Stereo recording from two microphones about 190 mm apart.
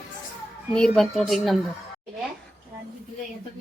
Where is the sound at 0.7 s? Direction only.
5° left (ahead or behind).